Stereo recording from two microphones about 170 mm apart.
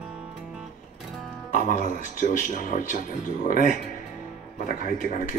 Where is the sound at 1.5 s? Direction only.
50° left (ahead or behind).